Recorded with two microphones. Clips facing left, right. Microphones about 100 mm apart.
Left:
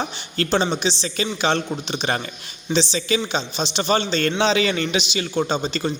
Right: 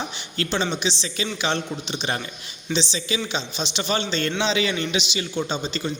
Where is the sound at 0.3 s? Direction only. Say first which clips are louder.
Left 4 dB; 40° left (ahead or behind).